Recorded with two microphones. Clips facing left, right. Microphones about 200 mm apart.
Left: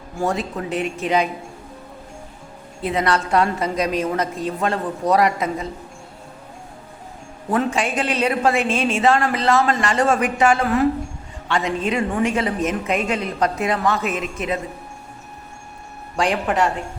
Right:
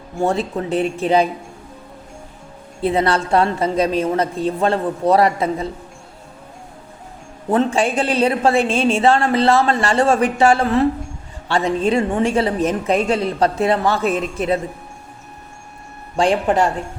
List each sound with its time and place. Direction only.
0.2 s a woman's voice: 30° right (ahead or behind)
2.8 s a woman's voice: 30° right (ahead or behind)
7.5 s a woman's voice: 30° right (ahead or behind)
16.1 s a woman's voice: 30° right (ahead or behind)